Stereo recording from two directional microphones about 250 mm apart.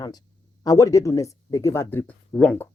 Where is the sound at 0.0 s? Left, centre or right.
Centre.